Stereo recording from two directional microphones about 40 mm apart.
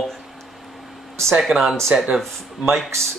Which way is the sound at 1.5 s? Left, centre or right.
Right.